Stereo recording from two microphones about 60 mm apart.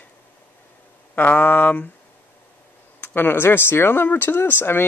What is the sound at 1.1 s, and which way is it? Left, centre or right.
Speech, left.